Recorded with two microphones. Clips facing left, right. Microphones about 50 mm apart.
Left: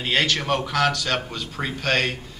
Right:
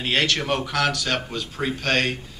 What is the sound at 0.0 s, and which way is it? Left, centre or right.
A man's voice, centre.